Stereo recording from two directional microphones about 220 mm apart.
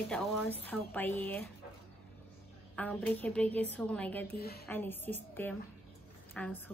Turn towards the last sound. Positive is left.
turn(degrees=5)  # may be behind; listen again after turning